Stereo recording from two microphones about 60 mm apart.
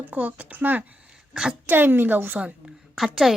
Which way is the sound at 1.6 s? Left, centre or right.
Right.